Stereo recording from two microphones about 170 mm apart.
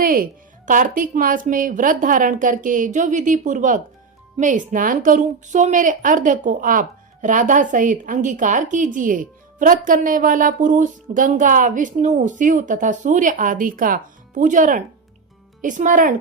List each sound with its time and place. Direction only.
0.0 s a woman's voice: 55° right (ahead or behind)